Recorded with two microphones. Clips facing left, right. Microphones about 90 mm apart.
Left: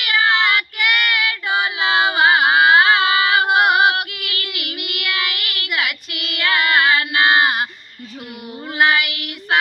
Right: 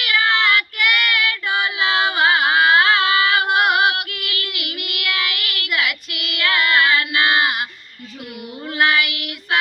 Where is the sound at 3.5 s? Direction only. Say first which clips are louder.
Left 2 dB; 20° left (ahead or behind).